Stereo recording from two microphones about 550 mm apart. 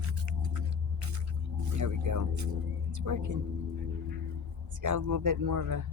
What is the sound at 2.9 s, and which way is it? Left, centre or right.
Speech, right.